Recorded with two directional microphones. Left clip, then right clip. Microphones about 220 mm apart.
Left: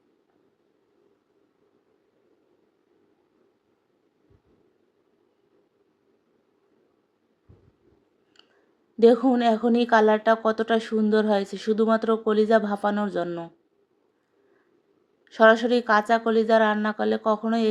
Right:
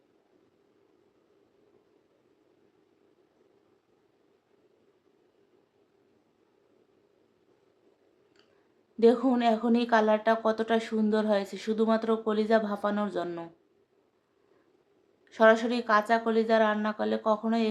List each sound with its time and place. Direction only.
9.0 s a woman's voice: 20° left (ahead or behind)
15.2 s a woman's voice: 20° left (ahead or behind)